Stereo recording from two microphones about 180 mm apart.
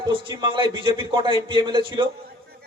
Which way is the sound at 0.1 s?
25° right (ahead or behind).